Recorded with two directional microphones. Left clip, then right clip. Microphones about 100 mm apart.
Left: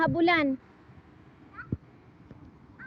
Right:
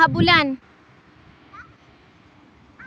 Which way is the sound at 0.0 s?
30° right (ahead or behind).